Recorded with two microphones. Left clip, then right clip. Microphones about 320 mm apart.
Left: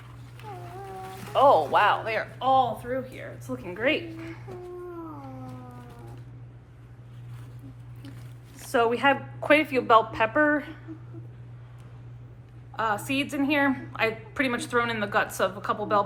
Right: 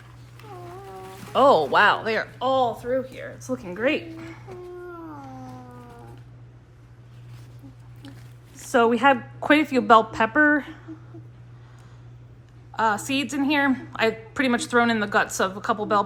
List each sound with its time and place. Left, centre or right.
0.9 s a sound: centre
1.3 s a woman's voice: right
8.7 s a woman's voice: right
12.7 s a woman's voice: right